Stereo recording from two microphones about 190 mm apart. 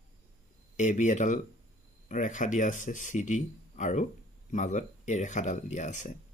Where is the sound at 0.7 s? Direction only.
40° left (ahead or behind).